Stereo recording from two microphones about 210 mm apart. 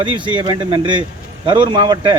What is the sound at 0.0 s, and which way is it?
Speech, 25° right (ahead or behind).